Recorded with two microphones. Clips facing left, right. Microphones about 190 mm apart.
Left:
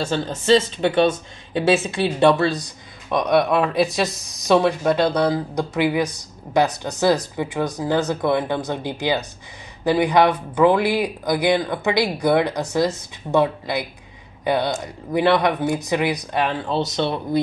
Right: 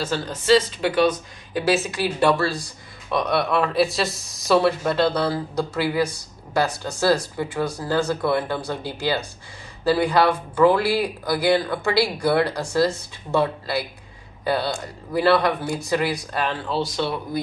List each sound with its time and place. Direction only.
0.1 s speech: 25° left (ahead or behind)